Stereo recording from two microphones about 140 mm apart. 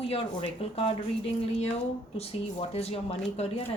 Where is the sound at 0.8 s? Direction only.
45° left (ahead or behind).